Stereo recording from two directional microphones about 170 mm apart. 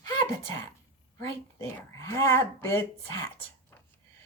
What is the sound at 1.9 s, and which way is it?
Speech, 15° left (ahead or behind).